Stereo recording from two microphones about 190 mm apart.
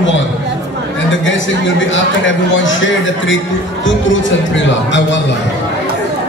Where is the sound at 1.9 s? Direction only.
80° left.